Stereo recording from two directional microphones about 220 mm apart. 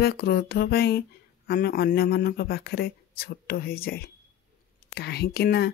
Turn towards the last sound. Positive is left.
turn(degrees=45)  # may be behind; listen again after turning